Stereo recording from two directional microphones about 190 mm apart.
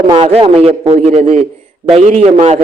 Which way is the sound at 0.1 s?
30° right (ahead or behind).